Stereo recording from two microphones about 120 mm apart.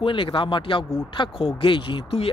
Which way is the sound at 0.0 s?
45° left (ahead or behind).